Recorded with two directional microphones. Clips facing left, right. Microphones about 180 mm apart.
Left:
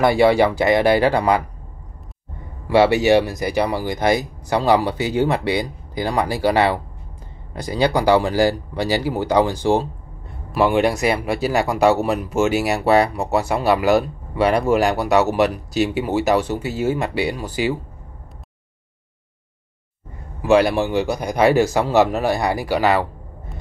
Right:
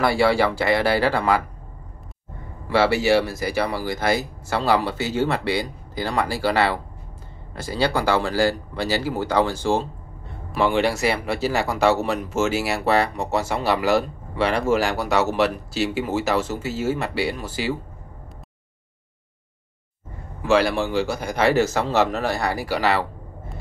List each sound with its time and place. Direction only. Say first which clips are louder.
0.0 s speech: left 4 dB; 20° left (ahead or behind)
2.7 s speech: left 4 dB; 15° left (ahead or behind)
20.4 s speech: left 4 dB; 20° left (ahead or behind)